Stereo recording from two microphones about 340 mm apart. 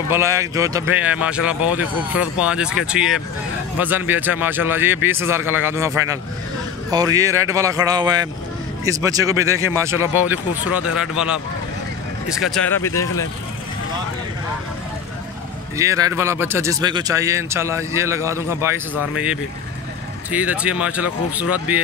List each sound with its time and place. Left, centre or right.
0.1 s speech: centre
15.8 s speech: centre
20.2 s speech: centre